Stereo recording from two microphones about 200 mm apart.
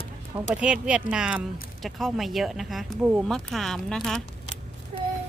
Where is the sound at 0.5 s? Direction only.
5° right (ahead or behind).